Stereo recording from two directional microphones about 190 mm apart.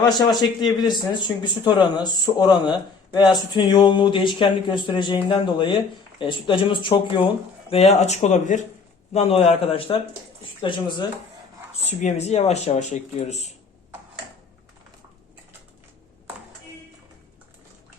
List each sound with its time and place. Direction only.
0.0 s speech: 20° left (ahead or behind)
11.9 s speech: 35° left (ahead or behind)